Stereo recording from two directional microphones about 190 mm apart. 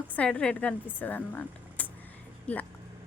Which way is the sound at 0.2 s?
5° left (ahead or behind).